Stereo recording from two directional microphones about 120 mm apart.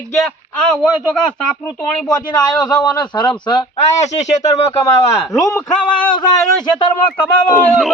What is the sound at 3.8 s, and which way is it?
Speech, 75° left (ahead or behind).